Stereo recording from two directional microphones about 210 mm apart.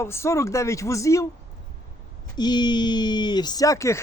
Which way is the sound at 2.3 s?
20° left (ahead or behind).